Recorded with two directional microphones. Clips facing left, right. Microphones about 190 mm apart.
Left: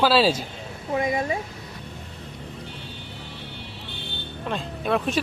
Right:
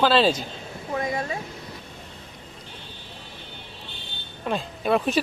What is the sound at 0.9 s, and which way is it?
Speech, 20° left (ahead or behind).